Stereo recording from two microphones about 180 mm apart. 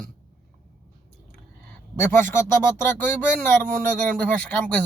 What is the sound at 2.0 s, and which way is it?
Speech, 15° left (ahead or behind).